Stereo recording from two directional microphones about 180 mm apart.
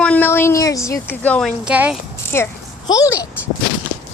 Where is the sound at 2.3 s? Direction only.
15° left (ahead or behind).